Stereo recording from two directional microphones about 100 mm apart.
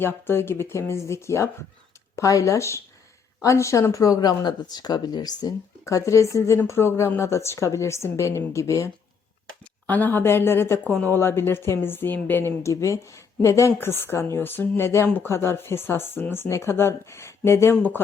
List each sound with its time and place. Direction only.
0.0 s a woman's voice: 20° left (ahead or behind)
9.8 s a woman's voice: 15° left (ahead or behind)